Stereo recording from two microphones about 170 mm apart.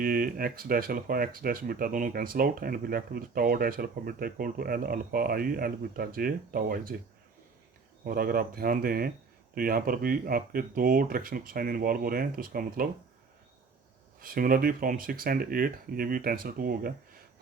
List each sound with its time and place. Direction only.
0.0 s speech: 60° right (ahead or behind)
8.0 s speech: 60° right (ahead or behind)
14.2 s speech: 55° right (ahead or behind)